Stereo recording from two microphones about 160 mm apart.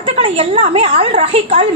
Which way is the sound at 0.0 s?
35° right (ahead or behind).